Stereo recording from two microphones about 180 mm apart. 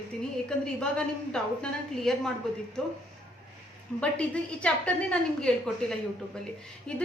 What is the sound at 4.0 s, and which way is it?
A woman's voice, 5° left (ahead or behind).